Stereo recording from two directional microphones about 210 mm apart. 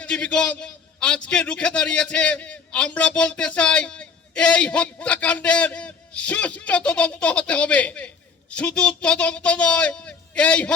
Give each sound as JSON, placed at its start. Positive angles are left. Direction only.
{"t": 0.0, "sound": "a man's voice", "side_deg": 5}